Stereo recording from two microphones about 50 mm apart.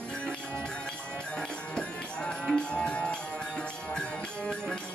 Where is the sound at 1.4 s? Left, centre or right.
Centre.